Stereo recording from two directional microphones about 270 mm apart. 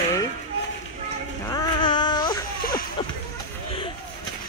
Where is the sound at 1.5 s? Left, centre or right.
Centre.